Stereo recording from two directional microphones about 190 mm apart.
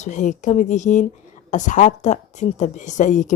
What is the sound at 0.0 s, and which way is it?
Speech, 40° left (ahead or behind).